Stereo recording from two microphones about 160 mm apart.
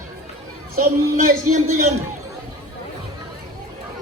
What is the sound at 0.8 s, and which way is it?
Speech, 55° right (ahead or behind).